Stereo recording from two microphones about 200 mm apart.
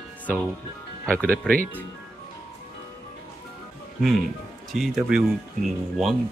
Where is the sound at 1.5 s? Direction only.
5° left (ahead or behind).